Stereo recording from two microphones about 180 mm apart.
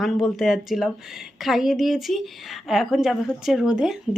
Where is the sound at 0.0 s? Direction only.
Centre (ahead or behind).